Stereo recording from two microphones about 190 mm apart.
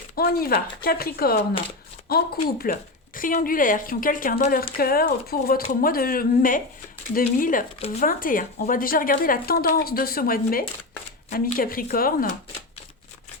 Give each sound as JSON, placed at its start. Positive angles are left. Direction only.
{"t": 0.2, "sound": "speech", "side_deg": 55}